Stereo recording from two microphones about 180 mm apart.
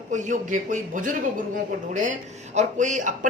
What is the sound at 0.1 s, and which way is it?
Speech, 45° right (ahead or behind).